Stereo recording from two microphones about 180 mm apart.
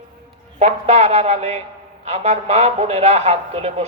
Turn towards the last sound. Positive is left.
turn(degrees=-35)  # may be behind; listen again after turning